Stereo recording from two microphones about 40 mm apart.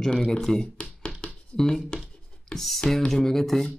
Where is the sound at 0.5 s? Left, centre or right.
Centre.